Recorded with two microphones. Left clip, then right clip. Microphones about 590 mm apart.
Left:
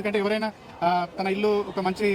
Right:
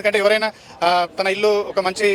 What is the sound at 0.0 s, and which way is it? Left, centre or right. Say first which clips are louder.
A man's voice: right 9 dB; right.